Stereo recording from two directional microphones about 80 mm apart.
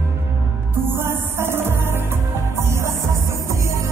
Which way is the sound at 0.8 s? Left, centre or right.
Right.